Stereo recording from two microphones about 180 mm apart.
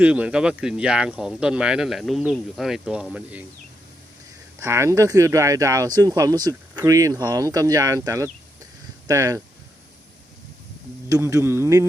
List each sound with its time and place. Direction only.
0.0 s speech: 5° right (ahead or behind)
4.6 s speech: 15° right (ahead or behind)
11.1 s speech: 15° right (ahead or behind)